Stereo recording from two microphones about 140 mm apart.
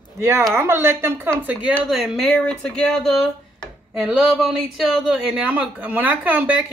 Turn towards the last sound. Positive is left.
turn(degrees=-10)  # may be behind; listen again after turning